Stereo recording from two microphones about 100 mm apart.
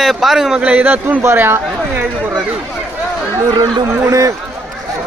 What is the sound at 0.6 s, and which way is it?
Speech, 15° right (ahead or behind).